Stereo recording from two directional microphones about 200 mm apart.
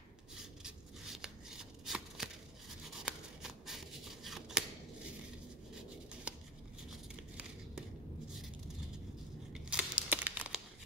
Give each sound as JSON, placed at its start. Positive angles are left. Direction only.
{"t": 0.4, "sound": "shuffling cards", "side_deg": 0}
{"t": 3.0, "sound": "scissors", "side_deg": 0}
{"t": 6.9, "sound": "a sound", "side_deg": 0}
{"t": 9.5, "sound": "crumpling", "side_deg": -5}